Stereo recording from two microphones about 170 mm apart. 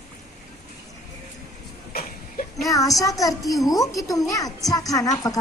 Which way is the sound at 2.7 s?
20° left (ahead or behind).